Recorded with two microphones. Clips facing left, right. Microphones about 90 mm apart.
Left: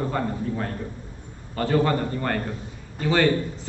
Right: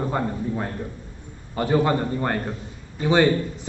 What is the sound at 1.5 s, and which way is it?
A man's voice, 15° right (ahead or behind).